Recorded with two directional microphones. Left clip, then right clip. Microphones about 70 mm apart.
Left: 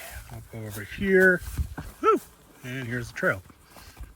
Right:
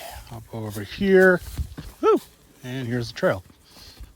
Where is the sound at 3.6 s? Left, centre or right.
Right.